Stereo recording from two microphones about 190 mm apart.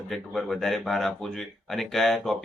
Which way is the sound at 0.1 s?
Centre (ahead or behind).